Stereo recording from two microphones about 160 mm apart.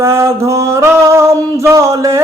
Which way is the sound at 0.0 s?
15° right (ahead or behind).